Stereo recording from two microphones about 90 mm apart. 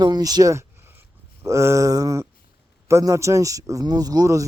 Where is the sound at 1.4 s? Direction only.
35° right (ahead or behind).